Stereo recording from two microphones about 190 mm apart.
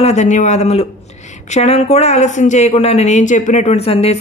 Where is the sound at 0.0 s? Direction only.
40° left (ahead or behind).